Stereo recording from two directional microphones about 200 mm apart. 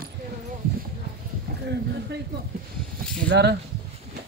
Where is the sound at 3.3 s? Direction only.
55° right (ahead or behind).